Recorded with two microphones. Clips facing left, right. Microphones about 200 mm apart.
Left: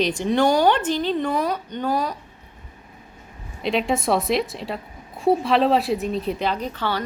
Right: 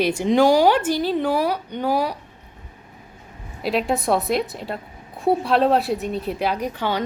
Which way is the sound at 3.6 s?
Centre (ahead or behind).